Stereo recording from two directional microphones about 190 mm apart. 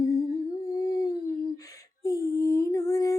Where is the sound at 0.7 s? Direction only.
20° left (ahead or behind).